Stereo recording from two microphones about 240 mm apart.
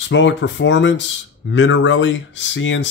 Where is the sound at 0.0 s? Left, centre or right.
Left.